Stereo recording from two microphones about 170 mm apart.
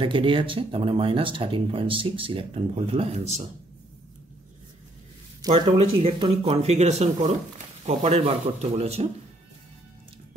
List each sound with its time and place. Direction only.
0.0 s speech: 30° right (ahead or behind)
5.5 s speech: 35° right (ahead or behind)